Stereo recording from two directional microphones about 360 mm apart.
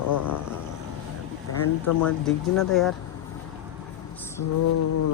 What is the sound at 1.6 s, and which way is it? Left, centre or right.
Speech, left.